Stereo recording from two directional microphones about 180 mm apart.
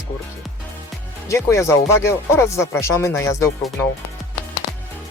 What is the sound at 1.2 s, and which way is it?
Speech, 15° left (ahead or behind).